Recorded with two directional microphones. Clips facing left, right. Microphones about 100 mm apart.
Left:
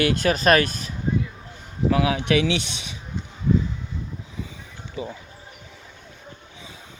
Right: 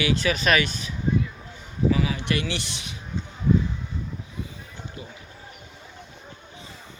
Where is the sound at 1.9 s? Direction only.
75° left (ahead or behind).